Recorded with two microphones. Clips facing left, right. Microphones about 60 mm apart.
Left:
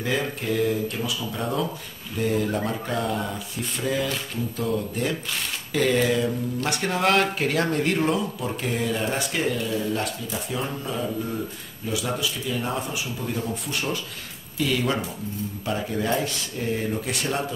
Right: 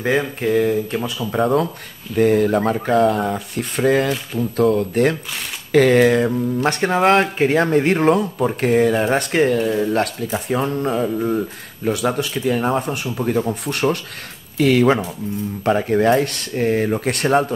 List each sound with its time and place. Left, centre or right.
0.0 s speech: right
1.4 s speech: right
6.6 s speech: right